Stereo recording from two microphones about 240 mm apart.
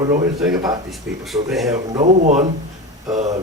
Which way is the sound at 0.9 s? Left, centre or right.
Centre.